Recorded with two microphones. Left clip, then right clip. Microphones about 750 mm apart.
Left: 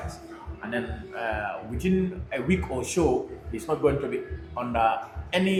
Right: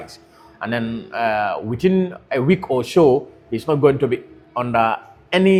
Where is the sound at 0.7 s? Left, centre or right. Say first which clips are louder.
Right 7 dB; right.